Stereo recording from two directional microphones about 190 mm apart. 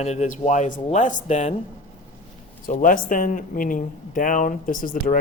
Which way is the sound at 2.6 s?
45° left (ahead or behind).